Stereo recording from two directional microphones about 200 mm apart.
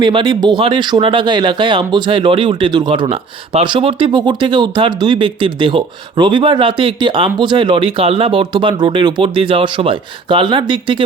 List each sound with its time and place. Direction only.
0.0 s speech: 25° right (ahead or behind)